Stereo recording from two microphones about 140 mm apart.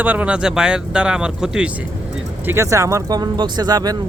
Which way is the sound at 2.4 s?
20° right (ahead or behind).